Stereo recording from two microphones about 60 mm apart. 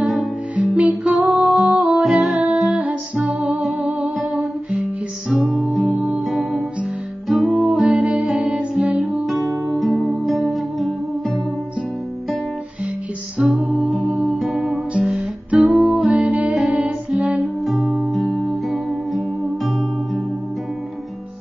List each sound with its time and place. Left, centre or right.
0.0 s music: centre
0.7 s music: right
1.2 s music: centre
2.3 s music: right
4.0 s humming: centre
5.3 s music: centre
5.9 s music: right
6.1 s music: centre
9.8 s music: centre
13.6 s music: centre
14.4 s music: centre
16.1 s music: right
17.6 s music: centre